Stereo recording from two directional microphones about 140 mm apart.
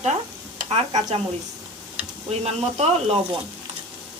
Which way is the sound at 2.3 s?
50° right (ahead or behind).